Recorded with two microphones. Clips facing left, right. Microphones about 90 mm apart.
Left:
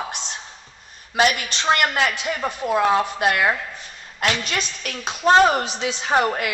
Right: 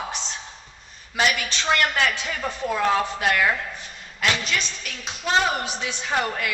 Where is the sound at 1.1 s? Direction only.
40° left (ahead or behind).